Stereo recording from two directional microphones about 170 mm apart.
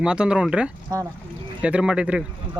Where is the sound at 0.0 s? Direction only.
5° right (ahead or behind).